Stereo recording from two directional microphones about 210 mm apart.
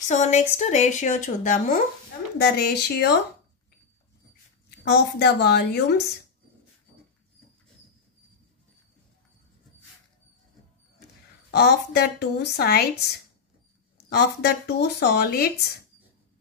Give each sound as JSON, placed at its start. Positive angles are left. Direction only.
{"t": 0.1, "sound": "speech", "side_deg": 35}
{"t": 2.3, "sound": "speech", "side_deg": 50}
{"t": 4.6, "sound": "speech", "side_deg": 50}
{"t": 11.5, "sound": "speech", "side_deg": 50}
{"t": 13.9, "sound": "speech", "side_deg": 50}